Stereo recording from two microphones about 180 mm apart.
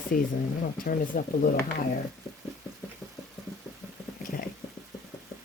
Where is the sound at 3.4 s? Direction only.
Centre (ahead or behind).